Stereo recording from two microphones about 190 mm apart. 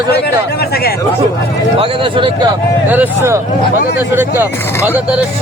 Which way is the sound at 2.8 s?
10° right (ahead or behind).